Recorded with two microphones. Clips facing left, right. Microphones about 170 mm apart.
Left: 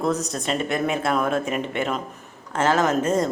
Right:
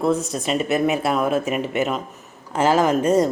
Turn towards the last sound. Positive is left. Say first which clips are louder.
# right 4 dB
turn(degrees=-10)  # may be behind; listen again after turning